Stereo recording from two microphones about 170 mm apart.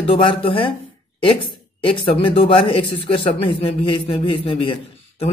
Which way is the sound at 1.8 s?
30° left (ahead or behind).